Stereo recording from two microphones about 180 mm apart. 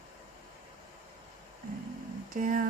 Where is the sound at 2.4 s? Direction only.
50° right (ahead or behind).